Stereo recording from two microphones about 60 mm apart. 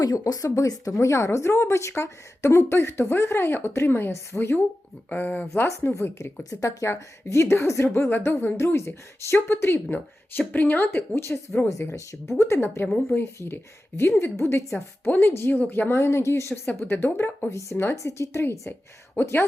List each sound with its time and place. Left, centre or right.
0.0 s speech: left
5.1 s speech: left
5.6 s speech: left
6.5 s speech: left
6.8 s speech: left
9.9 s speech: left
11.7 s speech: left
12.6 s speech: left
16.6 s speech: left
17.5 s speech: left
19.2 s speech: left